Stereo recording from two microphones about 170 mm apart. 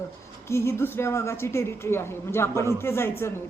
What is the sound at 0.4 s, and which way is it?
A woman's voice, 15° left (ahead or behind).